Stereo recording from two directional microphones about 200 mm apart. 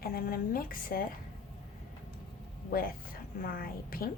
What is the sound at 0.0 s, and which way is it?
Speech, 50° left (ahead or behind).